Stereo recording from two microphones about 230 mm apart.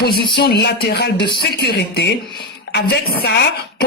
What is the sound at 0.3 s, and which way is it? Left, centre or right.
Speech, left.